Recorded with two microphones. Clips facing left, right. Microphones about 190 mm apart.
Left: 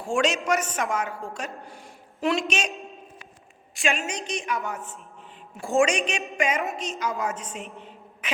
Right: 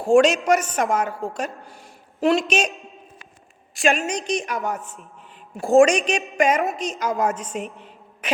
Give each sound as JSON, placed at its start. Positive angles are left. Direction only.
{"t": 0.0, "sound": "a woman's voice", "side_deg": -40}
{"t": 3.8, "sound": "a woman's voice", "side_deg": -40}
{"t": 7.5, "sound": "a woman's voice", "side_deg": -55}